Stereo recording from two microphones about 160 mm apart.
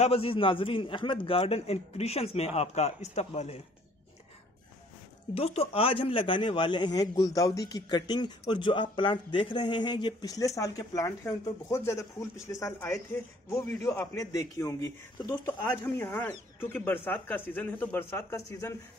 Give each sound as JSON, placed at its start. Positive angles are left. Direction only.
{"t": 0.0, "sound": "a man's voice", "side_deg": 35}
{"t": 5.3, "sound": "speech", "side_deg": 40}